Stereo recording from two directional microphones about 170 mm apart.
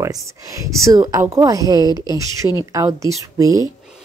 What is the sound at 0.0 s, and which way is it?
Speech, 20° right (ahead or behind).